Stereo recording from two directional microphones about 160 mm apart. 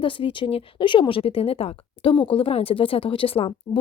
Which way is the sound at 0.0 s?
30° left (ahead or behind).